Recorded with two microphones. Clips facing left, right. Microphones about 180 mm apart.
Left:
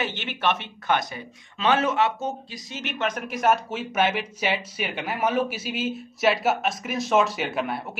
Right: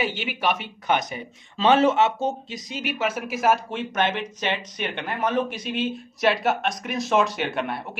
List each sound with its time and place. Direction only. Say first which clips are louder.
0.0 s speech: right 1 dB; 10° right (ahead or behind)
1.6 s speech: right 4 dB; 30° right (ahead or behind)
2.7 s speech: right 2 dB; 10° right (ahead or behind)